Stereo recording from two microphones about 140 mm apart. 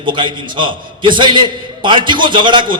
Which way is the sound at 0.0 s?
35° right (ahead or behind).